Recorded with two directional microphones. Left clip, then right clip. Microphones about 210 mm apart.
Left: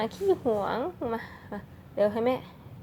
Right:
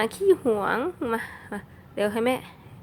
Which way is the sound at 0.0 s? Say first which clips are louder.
Right 5 dB; 25° right (ahead or behind).